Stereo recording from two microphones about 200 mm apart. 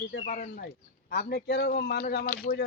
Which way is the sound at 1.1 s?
55° left (ahead or behind).